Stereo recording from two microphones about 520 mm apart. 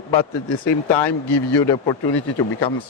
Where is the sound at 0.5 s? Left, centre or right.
Left.